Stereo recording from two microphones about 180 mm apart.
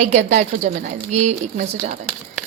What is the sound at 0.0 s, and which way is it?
A woman's voice, 40° right (ahead or behind).